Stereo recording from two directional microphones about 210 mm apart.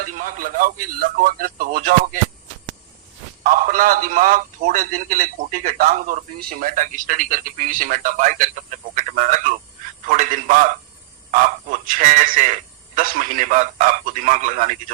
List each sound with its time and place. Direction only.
0.0 s speech: 40° right (ahead or behind)
3.4 s a man's voice: 40° right (ahead or behind)